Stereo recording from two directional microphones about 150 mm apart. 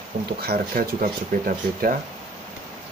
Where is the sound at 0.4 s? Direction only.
85° right.